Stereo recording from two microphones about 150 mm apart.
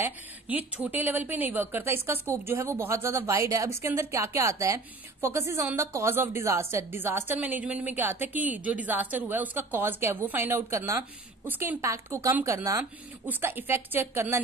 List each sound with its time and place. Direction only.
0.0 s a woman's voice: 10° right (ahead or behind)